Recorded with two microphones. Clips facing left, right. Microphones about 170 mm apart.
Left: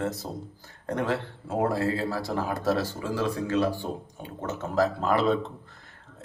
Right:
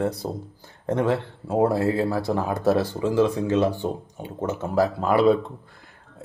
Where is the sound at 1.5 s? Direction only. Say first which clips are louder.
Right 5 dB; 15° right (ahead or behind).